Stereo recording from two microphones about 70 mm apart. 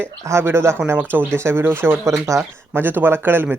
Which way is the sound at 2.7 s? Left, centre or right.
Right.